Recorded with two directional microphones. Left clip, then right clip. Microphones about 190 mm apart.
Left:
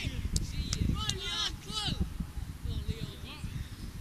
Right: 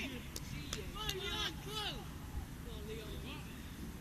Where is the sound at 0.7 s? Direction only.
50° right (ahead or behind).